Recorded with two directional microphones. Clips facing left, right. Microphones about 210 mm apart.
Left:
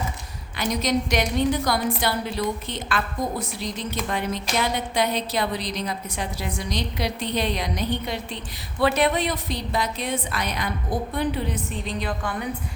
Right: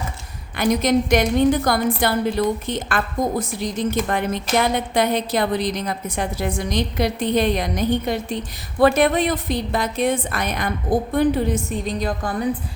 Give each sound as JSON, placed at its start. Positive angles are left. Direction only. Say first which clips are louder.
{"t": 0.5, "sound": "a woman's voice", "louder": "right 6 dB", "side_deg": -50}